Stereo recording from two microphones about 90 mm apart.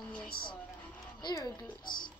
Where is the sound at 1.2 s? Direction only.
50° left (ahead or behind).